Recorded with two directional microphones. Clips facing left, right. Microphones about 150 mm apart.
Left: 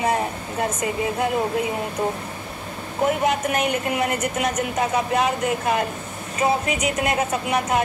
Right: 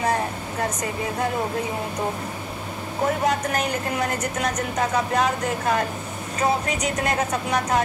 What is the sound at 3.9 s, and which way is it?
Speech, 5° left (ahead or behind).